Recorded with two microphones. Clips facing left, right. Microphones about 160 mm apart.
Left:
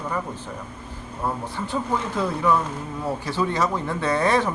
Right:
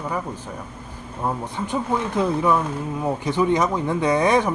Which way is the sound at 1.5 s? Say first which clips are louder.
Right 3 dB; 20° right (ahead or behind).